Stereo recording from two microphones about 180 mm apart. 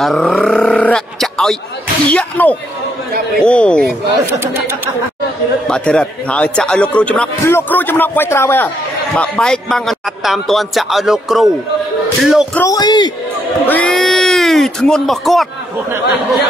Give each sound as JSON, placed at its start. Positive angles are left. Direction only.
{"t": 0.0, "sound": "a man's voice", "side_deg": 0}
{"t": 4.4, "sound": "speech", "side_deg": -10}
{"t": 5.7, "sound": "a man's voice", "side_deg": 5}
{"t": 12.5, "sound": "speech", "side_deg": 20}
{"t": 13.7, "sound": "speech", "side_deg": 5}